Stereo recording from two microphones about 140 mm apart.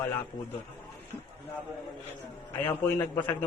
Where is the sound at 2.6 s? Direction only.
15° left (ahead or behind).